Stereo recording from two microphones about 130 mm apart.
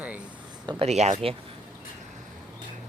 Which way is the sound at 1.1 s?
45° right (ahead or behind).